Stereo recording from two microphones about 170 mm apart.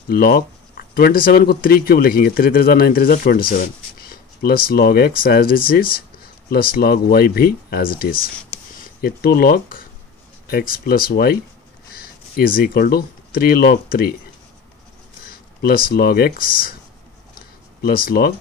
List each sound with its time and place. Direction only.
0.1 s speech: 60° left (ahead or behind)
15.2 s speech: 60° left (ahead or behind)
17.8 s speech: 60° left (ahead or behind)